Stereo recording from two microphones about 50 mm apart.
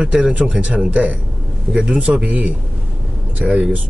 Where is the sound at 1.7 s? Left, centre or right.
Centre.